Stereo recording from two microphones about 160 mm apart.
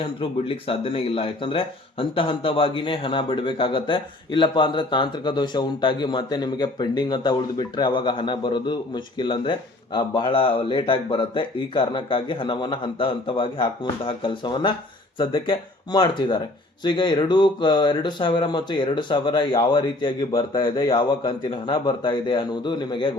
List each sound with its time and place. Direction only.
0.0 s speech: 35° left (ahead or behind)